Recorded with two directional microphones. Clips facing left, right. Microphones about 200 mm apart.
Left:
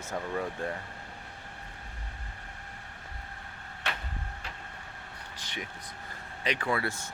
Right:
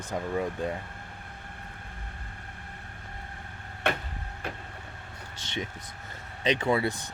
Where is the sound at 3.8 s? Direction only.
55° right (ahead or behind).